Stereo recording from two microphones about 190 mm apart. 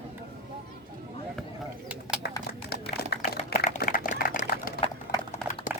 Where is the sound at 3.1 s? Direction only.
55° left (ahead or behind).